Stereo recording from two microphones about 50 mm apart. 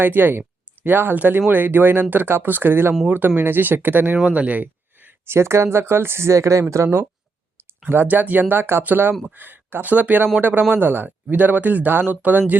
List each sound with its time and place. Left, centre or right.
0.0 s speech: right
4.2 s a sound: right
5.2 s speech: right
8.0 s speech: right